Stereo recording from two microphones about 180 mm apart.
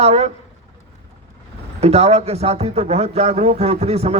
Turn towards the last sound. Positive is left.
turn(degrees=-35)  # may be behind; listen again after turning